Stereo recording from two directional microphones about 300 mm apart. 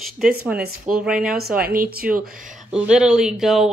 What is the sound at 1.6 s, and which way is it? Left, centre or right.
Speech, right.